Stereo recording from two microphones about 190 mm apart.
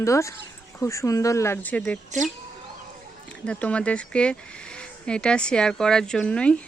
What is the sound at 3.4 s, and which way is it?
Speech, 5° left (ahead or behind).